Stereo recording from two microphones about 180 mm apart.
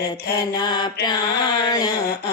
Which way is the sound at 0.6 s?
25° left (ahead or behind).